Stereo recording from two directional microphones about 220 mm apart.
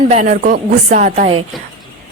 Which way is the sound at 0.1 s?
35° right (ahead or behind).